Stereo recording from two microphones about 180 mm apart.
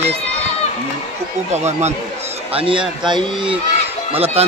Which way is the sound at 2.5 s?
30° right (ahead or behind).